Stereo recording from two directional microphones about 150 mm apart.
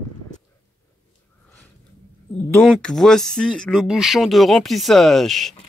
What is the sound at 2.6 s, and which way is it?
A man's voice, 5° left (ahead or behind).